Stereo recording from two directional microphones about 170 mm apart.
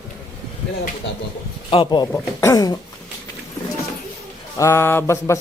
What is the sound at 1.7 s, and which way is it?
Speech, 30° left (ahead or behind).